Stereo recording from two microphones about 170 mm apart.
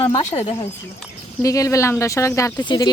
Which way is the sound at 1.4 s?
20° left (ahead or behind).